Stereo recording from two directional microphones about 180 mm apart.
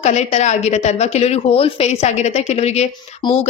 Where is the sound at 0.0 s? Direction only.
40° left (ahead or behind).